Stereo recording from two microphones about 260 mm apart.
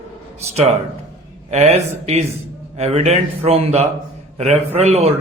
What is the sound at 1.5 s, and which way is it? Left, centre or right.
A man's voice, right.